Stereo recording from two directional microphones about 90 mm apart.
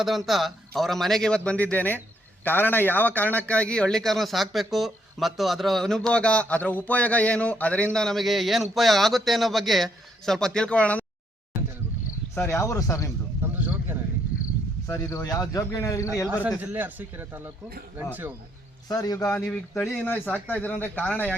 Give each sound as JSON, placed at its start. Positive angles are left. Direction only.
{"t": 0.0, "sound": "a man's voice", "side_deg": 0}
{"t": 7.9, "sound": "speech", "side_deg": 5}
{"t": 12.3, "sound": "speech", "side_deg": 30}
{"t": 13.4, "sound": "speech", "side_deg": -20}
{"t": 14.8, "sound": "speech", "side_deg": 35}
{"t": 16.6, "sound": "a man's voice", "side_deg": -20}
{"t": 18.9, "sound": "a man's voice", "side_deg": 45}
{"t": 19.3, "sound": "a man's voice", "side_deg": 15}